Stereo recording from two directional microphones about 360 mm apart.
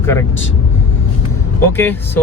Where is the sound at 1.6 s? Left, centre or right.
Centre.